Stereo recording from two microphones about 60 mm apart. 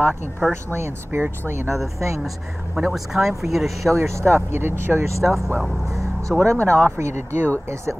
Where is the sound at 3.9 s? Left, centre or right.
Right.